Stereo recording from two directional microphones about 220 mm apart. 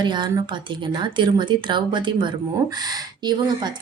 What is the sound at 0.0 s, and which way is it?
Speech, 20° right (ahead or behind).